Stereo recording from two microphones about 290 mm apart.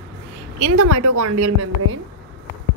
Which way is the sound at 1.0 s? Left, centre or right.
Right.